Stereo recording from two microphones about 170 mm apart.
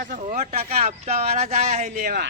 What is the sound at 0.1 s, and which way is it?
Speech, 45° right (ahead or behind).